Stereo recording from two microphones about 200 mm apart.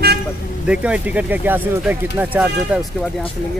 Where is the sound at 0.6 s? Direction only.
5° right (ahead or behind).